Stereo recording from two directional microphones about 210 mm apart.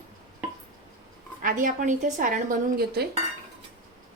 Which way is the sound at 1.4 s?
40° right (ahead or behind).